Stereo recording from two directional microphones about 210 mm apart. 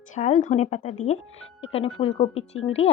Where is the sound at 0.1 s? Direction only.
35° left (ahead or behind).